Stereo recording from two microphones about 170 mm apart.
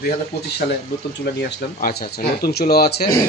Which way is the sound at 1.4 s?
65° left (ahead or behind).